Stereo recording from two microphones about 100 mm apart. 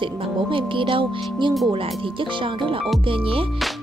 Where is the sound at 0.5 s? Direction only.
60° right (ahead or behind).